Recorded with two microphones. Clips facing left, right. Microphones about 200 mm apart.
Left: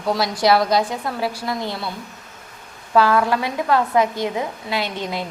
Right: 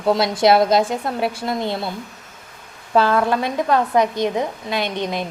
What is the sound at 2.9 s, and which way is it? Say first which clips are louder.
A woman's voice: even; 25° right (ahead or behind).